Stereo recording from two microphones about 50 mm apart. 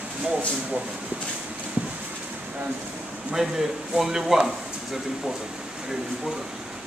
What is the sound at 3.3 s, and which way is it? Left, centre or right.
Speech, centre.